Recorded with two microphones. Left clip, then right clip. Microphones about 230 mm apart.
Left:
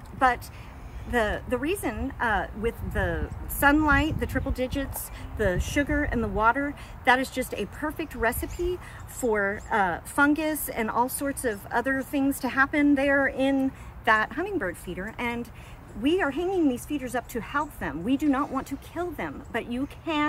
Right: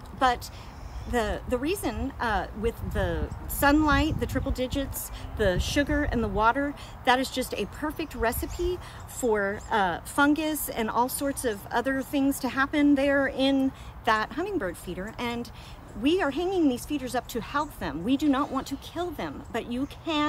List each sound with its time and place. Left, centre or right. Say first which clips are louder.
1.1 s speech: left 2 dB; centre